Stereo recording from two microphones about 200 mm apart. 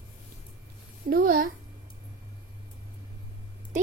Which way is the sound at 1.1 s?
45° right (ahead or behind).